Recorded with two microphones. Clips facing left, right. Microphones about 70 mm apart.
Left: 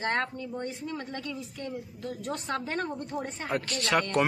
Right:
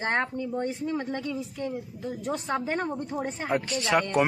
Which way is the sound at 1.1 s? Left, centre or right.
Centre.